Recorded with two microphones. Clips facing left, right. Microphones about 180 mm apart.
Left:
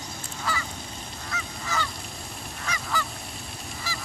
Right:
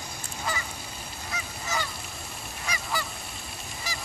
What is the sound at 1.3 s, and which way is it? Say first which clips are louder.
Goose: left 1 dB; 15° right (ahead or behind).